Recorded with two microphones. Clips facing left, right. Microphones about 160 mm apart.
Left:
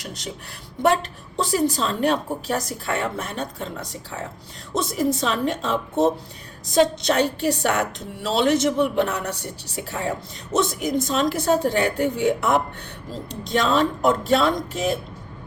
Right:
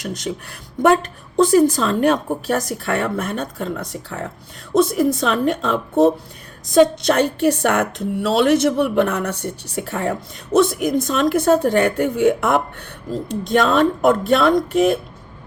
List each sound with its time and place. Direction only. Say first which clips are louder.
0.0 s a woman's voice: right 8 dB; 50° right (ahead or behind)
1.4 s a woman's voice: right 8 dB; 50° right (ahead or behind)